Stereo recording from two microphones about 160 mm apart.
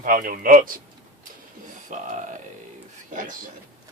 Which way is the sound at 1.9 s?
50° right (ahead or behind).